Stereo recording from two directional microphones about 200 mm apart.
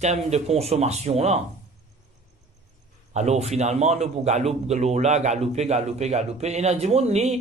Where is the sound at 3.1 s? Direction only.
35° right (ahead or behind).